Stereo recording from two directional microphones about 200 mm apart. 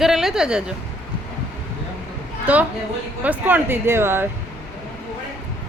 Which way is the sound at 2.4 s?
5° right (ahead or behind).